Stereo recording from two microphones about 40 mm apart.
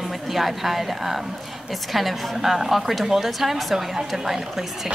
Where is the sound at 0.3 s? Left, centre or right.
Centre.